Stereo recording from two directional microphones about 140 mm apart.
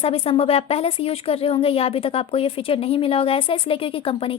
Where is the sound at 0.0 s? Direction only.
45° left (ahead or behind).